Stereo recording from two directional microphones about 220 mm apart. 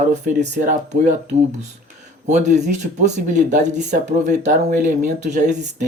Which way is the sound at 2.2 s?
30° right (ahead or behind).